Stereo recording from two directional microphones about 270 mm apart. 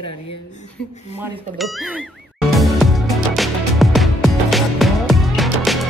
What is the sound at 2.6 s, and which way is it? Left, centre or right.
Music, centre.